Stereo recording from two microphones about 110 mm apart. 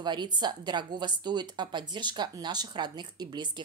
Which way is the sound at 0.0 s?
40° right (ahead or behind).